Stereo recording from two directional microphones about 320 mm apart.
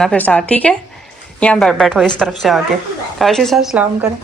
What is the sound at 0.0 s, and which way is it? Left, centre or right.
Speech, centre.